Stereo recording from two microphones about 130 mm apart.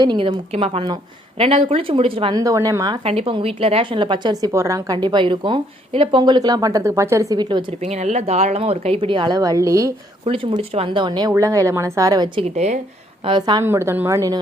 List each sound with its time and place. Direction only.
0.2 s speech: 50° right (ahead or behind)
2.3 s speech: 25° right (ahead or behind)
3.0 s a woman's voice: 45° right (ahead or behind)
7.8 s speech: 55° right (ahead or behind); by 9.9 s 25° right (ahead or behind)
10.2 s a woman's voice: 45° right (ahead or behind)
12.5 s speech: 60° right (ahead or behind)
13.2 s a woman's voice: 35° right (ahead or behind)
13.7 s a woman's voice: 20° right (ahead or behind)